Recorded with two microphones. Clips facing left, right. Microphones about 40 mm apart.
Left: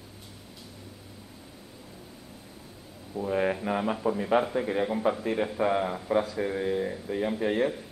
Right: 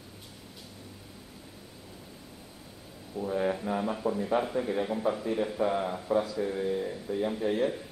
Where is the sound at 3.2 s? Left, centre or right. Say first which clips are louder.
Left 2 dB; left.